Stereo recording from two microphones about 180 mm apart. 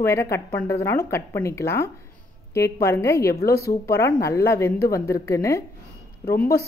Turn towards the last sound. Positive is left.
turn(degrees=15)  # may be behind; listen again after turning